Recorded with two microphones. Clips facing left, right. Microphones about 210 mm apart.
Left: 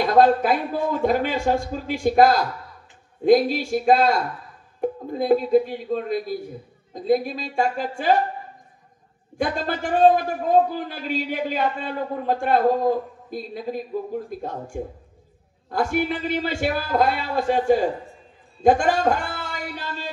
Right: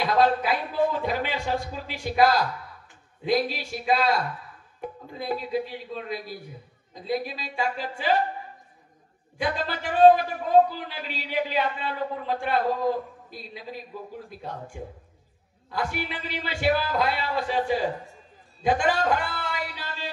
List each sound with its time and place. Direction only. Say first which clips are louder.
0.0 s a man's voice: left 5 dB; 50° left (ahead or behind)
9.4 s a man's voice: left 4 dB; 50° left (ahead or behind)
18.6 s a sound: left 6 dB; 45° left (ahead or behind)